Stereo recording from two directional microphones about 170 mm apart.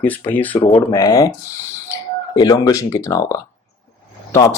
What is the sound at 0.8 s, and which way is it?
Speech, 25° left (ahead or behind).